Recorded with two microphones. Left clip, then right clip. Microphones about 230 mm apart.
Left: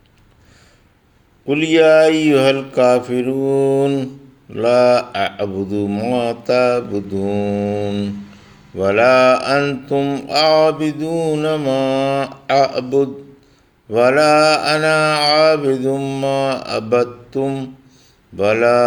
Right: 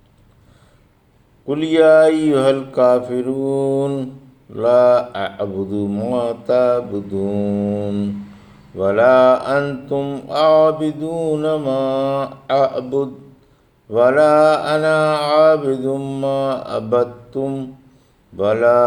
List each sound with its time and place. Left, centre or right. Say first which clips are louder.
1.5 s mantra: left 1 dB; left
13.9 s mantra: even; left